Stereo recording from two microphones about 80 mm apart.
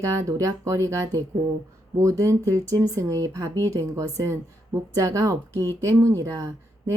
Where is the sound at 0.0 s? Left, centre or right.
Right.